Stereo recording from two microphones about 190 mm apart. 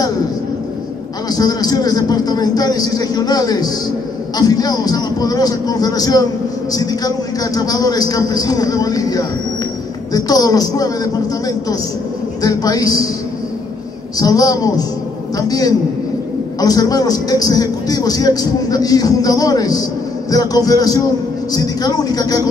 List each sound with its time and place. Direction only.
1.3 s a man's voice: 20° left (ahead or behind)
12.4 s a man's voice: 20° left (ahead or behind)
14.1 s a man's voice: 20° left (ahead or behind)